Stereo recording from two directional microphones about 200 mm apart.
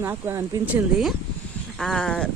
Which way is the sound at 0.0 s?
10° right (ahead or behind).